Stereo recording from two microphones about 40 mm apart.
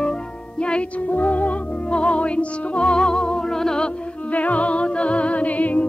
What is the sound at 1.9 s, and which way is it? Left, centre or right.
Music, left.